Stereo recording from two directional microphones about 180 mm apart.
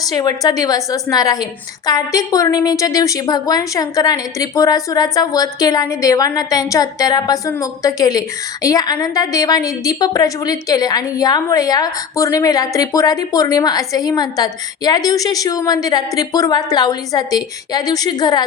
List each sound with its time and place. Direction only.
0.1 s a woman's voice: 20° left (ahead or behind)